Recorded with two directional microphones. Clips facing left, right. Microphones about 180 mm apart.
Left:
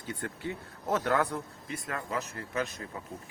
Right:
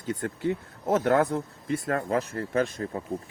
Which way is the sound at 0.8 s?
25° right (ahead or behind).